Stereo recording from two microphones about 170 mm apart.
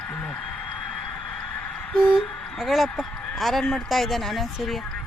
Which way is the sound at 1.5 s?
5° left (ahead or behind).